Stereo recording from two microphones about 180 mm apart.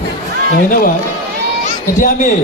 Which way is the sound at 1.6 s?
45° left (ahead or behind).